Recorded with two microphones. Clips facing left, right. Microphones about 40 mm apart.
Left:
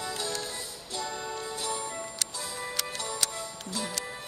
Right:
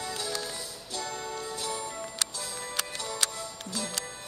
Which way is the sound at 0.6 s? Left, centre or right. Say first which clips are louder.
Left 1 dB; centre.